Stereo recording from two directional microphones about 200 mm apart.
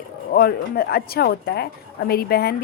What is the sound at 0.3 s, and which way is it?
A woman's voice, 50° left (ahead or behind).